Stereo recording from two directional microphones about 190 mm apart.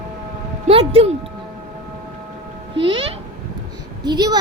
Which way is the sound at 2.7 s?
25° right (ahead or behind).